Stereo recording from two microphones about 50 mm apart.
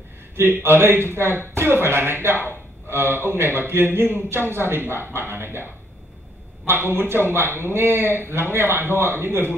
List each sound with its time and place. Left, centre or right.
0.4 s speech: right